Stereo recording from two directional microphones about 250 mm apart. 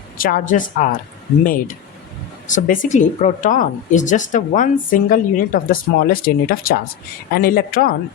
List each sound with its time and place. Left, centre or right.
0.2 s speech: left